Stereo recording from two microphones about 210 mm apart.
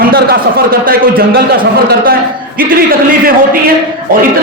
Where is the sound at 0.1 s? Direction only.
45° right (ahead or behind).